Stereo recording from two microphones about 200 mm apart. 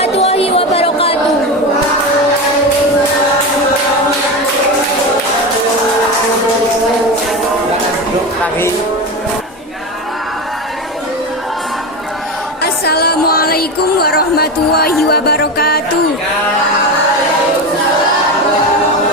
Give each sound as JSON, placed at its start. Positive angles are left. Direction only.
{"t": 0.0, "sound": "music", "side_deg": 30}
{"t": 12.6, "sound": "music", "side_deg": 50}